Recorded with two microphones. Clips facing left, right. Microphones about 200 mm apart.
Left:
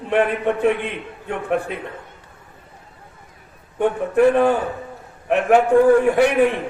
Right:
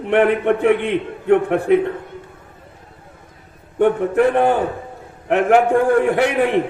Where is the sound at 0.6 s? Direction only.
60° right (ahead or behind).